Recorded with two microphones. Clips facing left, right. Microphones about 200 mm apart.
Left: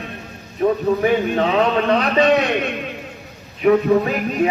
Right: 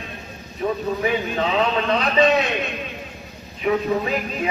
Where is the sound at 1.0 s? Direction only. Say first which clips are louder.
Left 5 dB; 45° left (ahead or behind).